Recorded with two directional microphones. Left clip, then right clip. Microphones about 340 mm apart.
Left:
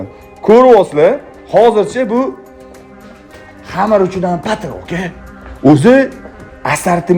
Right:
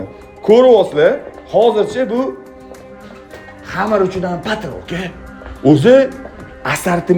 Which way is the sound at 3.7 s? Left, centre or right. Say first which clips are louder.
Left 4 dB; centre.